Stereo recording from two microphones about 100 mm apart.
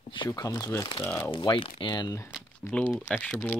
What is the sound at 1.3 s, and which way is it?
Speech, 55° left (ahead or behind).